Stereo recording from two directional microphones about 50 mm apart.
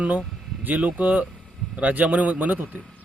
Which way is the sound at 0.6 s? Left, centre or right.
Right.